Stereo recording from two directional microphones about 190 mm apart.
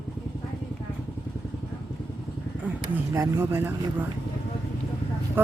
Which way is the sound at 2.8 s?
15° right (ahead or behind).